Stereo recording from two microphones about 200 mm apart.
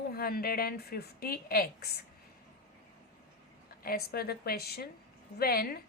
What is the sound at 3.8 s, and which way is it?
A woman's voice, 50° left (ahead or behind).